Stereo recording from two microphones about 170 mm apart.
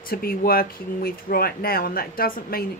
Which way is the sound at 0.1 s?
60° left (ahead or behind).